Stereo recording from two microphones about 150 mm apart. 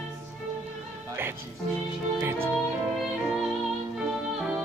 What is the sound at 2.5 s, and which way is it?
Music, centre (ahead or behind).